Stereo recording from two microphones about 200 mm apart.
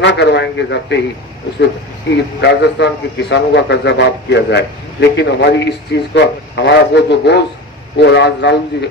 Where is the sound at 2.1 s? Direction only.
60° left (ahead or behind).